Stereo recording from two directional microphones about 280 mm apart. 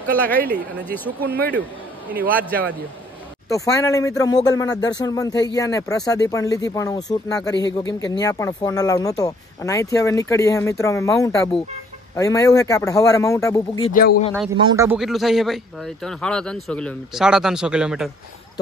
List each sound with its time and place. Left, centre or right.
0.0 s speech: centre
1.2 s speech: right
3.4 s speech: centre
13.8 s a man's voice: left
14.6 s speech: centre